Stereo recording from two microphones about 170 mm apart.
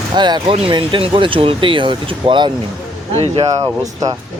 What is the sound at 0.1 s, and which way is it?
Speech, 25° right (ahead or behind).